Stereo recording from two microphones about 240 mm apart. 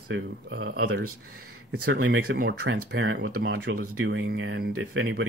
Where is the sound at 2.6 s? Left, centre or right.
Right.